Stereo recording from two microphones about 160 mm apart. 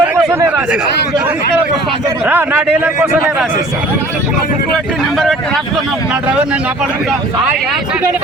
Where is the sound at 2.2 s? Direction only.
10° right (ahead or behind).